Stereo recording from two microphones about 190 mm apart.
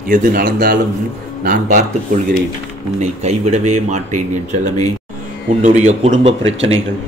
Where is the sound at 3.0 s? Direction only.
35° right (ahead or behind).